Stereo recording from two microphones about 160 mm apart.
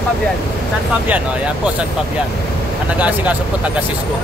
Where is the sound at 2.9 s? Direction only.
10° right (ahead or behind).